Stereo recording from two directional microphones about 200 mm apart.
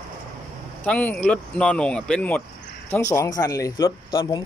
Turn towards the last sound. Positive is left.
turn(degrees=20)  # may be behind; listen again after turning